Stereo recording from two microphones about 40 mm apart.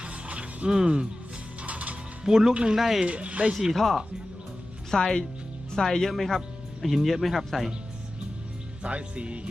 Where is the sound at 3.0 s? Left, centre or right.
Right.